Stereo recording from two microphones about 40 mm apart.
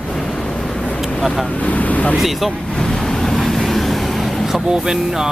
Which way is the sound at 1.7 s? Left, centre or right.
Left.